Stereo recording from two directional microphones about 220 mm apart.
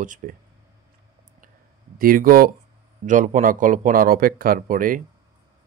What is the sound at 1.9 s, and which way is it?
Speech, 40° right (ahead or behind).